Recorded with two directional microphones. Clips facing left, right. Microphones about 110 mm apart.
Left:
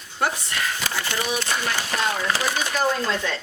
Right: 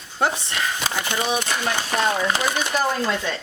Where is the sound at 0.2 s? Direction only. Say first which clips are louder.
Right 2 dB; 25° right (ahead or behind).